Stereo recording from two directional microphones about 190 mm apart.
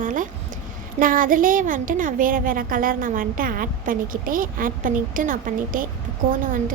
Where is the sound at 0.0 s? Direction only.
45° right (ahead or behind).